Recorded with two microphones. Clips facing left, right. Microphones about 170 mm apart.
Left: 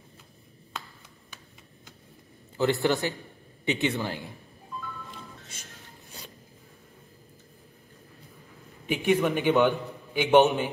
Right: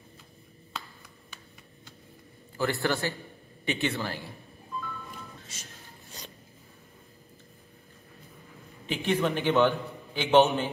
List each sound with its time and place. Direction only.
2.5 s a man's voice: 20° left (ahead or behind)
5.5 s a sound: 55° left (ahead or behind)
8.8 s a man's voice: 10° left (ahead or behind)